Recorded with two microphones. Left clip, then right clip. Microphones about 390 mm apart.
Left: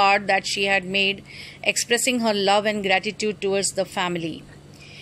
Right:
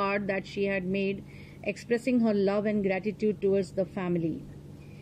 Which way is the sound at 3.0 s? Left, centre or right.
Left.